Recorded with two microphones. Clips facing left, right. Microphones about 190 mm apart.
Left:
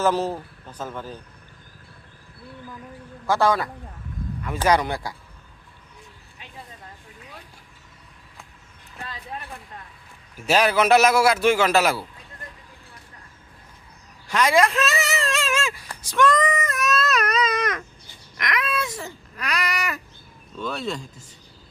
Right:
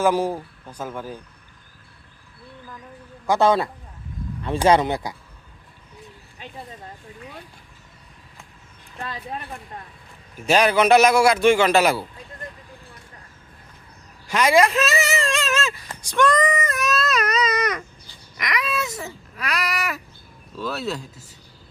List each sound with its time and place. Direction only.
0.0 s speech: 10° right (ahead or behind)
3.2 s speech: 20° right (ahead or behind)
10.4 s baby cry: 5° left (ahead or behind)
14.3 s speech: centre (ahead or behind)
18.3 s baby cry: centre (ahead or behind)